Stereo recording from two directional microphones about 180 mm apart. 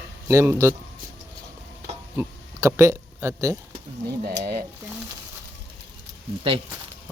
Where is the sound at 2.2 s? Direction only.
15° right (ahead or behind).